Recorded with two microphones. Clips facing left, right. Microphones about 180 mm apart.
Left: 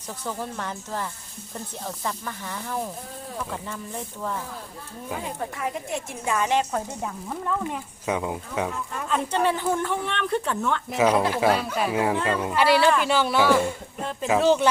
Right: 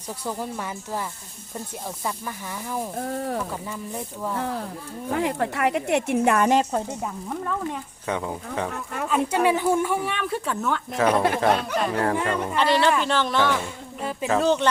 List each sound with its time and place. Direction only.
0.3 s speech: 10° right (ahead or behind)
2.0 s speech: 10° right (ahead or behind)
3.0 s a woman's voice: 70° right (ahead or behind)
5.1 s a woman's voice: 75° right (ahead or behind)
7.3 s speech: 5° left (ahead or behind)
9.0 s speech: 10° right (ahead or behind)
10.9 s speech: 10° left (ahead or behind)
14.0 s speech: 5° right (ahead or behind)